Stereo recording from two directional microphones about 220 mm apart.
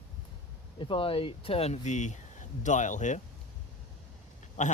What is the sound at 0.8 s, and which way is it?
Speech, 25° left (ahead or behind).